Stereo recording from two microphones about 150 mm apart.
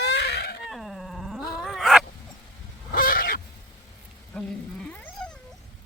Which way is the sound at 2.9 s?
70° left (ahead or behind).